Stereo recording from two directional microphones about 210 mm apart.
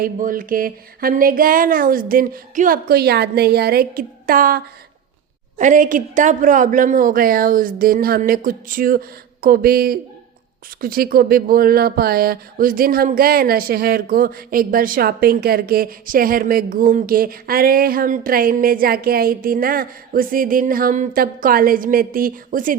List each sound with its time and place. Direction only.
0.0 s a woman's voice: 40° right (ahead or behind)